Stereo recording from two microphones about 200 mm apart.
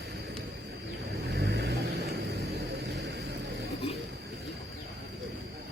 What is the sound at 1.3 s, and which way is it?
Vehicle, 55° right (ahead or behind).